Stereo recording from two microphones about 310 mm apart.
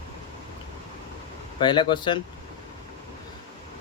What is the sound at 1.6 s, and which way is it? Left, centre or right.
Speech, centre.